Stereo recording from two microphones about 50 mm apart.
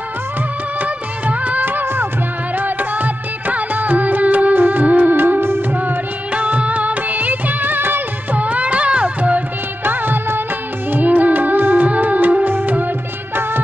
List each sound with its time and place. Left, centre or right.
0.7 s music of bollywood: right
2.5 s music: right
6.3 s music: right
8.4 s music: right
9.8 s music of bollywood: right
10.9 s music: right